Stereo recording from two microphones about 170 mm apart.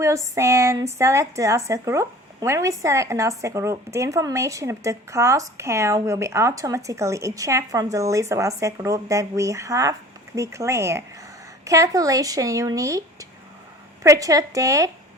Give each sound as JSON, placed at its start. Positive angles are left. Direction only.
{"t": 0.3, "sound": "speech", "side_deg": -15}